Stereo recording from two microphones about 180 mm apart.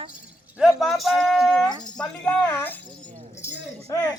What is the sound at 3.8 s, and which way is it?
Speech, 15° left (ahead or behind).